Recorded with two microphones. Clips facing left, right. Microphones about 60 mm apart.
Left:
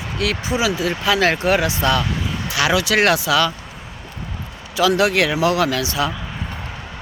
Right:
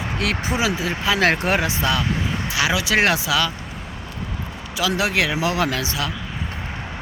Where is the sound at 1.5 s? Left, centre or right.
Right.